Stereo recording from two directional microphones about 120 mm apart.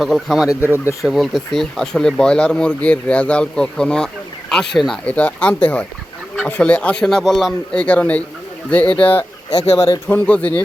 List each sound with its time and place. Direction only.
0.0 s speech: centre (ahead or behind)
9.5 s speech: 55° left (ahead or behind)
9.9 s speech: 15° left (ahead or behind)